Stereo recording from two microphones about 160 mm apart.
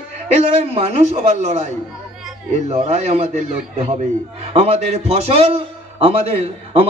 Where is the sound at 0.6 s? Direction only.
40° right (ahead or behind).